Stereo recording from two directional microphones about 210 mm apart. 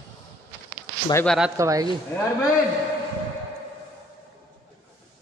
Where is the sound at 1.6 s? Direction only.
15° right (ahead or behind).